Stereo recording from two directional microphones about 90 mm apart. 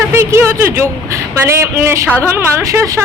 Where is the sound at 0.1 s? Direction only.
30° right (ahead or behind).